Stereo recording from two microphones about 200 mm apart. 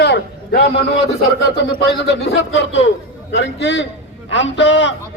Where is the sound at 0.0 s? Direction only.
55° left (ahead or behind).